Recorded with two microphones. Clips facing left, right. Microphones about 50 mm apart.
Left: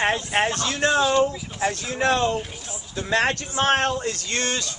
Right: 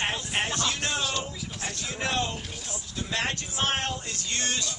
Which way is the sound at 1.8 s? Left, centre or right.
Left.